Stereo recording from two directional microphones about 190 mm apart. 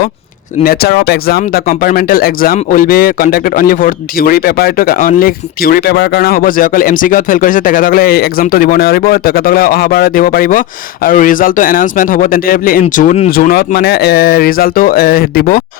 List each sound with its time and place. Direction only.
0.6 s speech: 55° left (ahead or behind)